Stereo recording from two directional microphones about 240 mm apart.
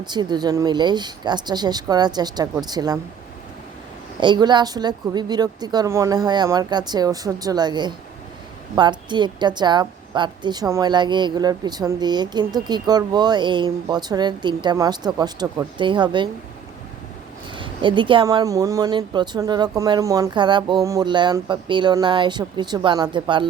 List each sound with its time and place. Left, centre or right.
0.0 s a woman's voice: centre
4.2 s a woman's voice: centre
17.5 s a woman's voice: centre